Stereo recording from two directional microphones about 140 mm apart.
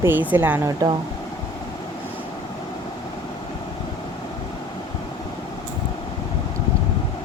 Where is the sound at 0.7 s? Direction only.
30° right (ahead or behind).